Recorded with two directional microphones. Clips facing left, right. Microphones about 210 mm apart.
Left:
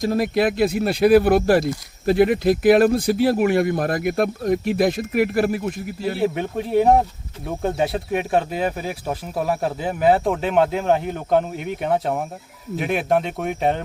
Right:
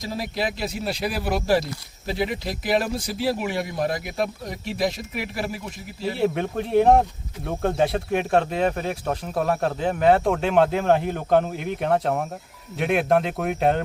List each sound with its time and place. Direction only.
0.0 s speech: 55° left (ahead or behind)
6.1 s speech: centre (ahead or behind)